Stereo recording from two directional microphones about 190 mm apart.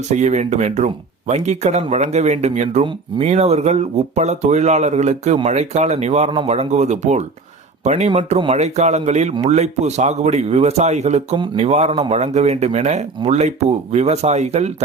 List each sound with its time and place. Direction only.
0.1 s speech: 40° right (ahead or behind)